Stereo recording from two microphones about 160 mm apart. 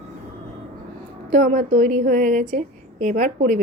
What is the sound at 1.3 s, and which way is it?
A woman's voice, 55° right (ahead or behind).